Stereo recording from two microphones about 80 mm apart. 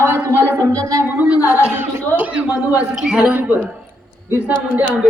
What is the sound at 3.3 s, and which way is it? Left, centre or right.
Speech, right.